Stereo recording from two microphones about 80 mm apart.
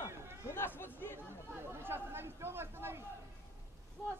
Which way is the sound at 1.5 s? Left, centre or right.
Right.